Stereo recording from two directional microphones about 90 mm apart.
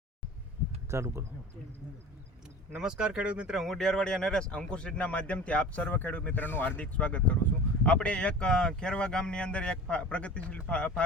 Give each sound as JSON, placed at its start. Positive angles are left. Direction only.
{"t": 0.9, "sound": "speech", "side_deg": -30}
{"t": 2.7, "sound": "speech", "side_deg": -10}
{"t": 3.6, "sound": "speech", "side_deg": 5}